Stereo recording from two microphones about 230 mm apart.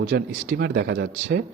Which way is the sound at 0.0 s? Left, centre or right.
Right.